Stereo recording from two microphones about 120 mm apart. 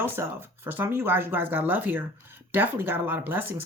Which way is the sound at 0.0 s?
20° right (ahead or behind).